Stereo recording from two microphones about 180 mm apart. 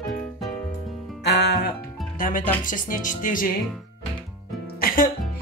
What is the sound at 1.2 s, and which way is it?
Music, 70° left (ahead or behind).